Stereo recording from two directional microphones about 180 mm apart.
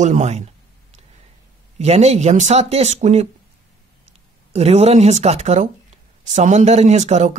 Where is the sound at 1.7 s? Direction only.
35° right (ahead or behind).